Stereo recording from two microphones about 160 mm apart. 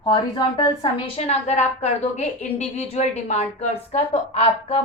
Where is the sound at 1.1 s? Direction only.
45° left (ahead or behind).